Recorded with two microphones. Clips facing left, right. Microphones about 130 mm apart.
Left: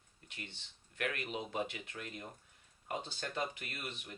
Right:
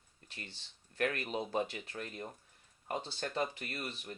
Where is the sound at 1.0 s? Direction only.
35° right (ahead or behind).